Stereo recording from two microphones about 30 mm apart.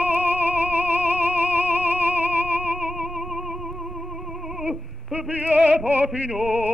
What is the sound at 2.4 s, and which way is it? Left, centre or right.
Music, right.